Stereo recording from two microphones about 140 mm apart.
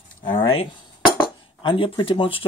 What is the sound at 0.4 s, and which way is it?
Speech, 40° left (ahead or behind).